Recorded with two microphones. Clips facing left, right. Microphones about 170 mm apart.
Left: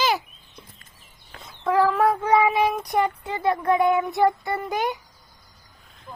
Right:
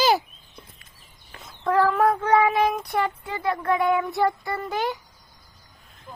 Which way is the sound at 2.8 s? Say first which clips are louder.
Left 2 dB; 20° left (ahead or behind).